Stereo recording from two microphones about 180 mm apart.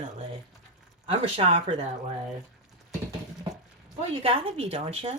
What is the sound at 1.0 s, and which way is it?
Speech, 35° right (ahead or behind).